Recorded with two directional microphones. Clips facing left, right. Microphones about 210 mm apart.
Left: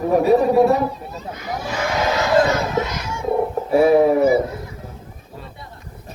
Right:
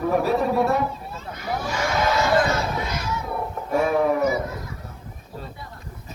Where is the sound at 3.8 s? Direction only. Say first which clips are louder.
Left 7 dB; 35° left (ahead or behind).